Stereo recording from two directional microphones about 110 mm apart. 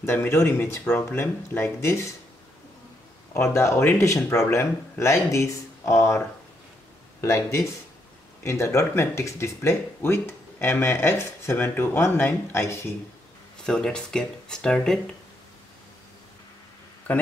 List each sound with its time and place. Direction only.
0.0 s speech: 25° left (ahead or behind)
3.3 s speech: 25° left (ahead or behind)
13.7 s speech: 5° left (ahead or behind)